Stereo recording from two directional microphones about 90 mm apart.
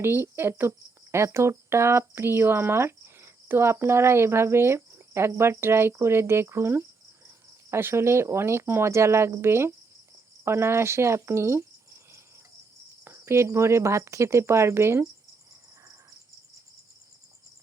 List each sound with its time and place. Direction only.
0.0 s speech: 25° right (ahead or behind)
7.3 s cricket: 25° right (ahead or behind)
10.4 s speech: 30° right (ahead or behind)